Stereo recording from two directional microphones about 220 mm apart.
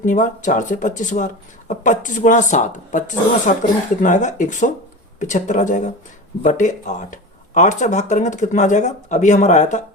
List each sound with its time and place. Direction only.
0.0 s speech: 35° left (ahead or behind)